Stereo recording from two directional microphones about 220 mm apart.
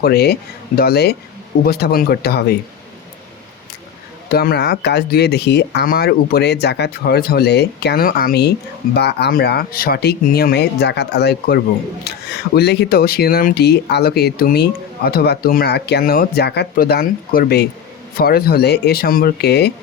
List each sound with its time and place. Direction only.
0.0 s speech: 45° left (ahead or behind)
4.3 s speech: 45° left (ahead or behind)